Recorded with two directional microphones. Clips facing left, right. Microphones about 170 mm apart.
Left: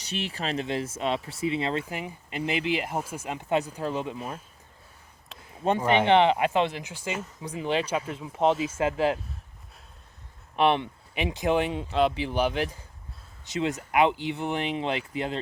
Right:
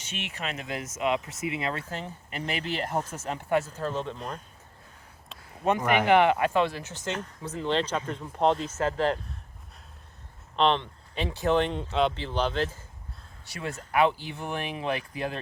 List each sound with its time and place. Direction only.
0.0 s speech: 35° left (ahead or behind)
1.8 s speech: 10° left (ahead or behind)
5.6 s speech: 30° left (ahead or behind); by 9.2 s 10° left (ahead or behind)
10.6 s speech: 10° left (ahead or behind)